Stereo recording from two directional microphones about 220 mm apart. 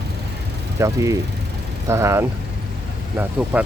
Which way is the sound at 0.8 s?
15° right (ahead or behind).